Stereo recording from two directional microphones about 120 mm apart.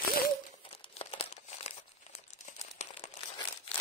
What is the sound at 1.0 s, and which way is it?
Crumpling, 55° left (ahead or behind).